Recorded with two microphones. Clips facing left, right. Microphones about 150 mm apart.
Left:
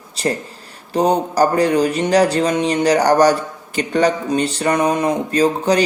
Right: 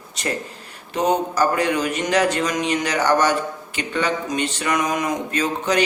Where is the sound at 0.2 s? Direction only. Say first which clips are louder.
Left 5 dB; 35° left (ahead or behind).